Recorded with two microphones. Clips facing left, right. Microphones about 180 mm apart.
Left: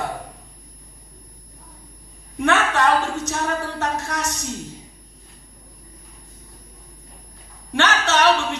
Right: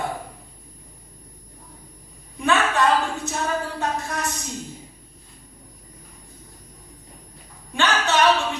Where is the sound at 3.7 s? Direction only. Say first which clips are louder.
Left 1 dB; 85° left.